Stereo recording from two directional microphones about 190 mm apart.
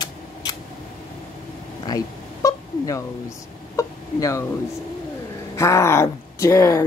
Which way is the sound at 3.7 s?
15° left (ahead or behind).